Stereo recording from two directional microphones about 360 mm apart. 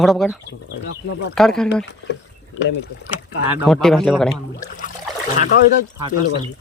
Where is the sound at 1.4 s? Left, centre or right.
Centre.